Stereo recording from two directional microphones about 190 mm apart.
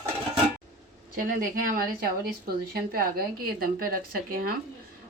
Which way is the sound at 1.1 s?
45° right (ahead or behind).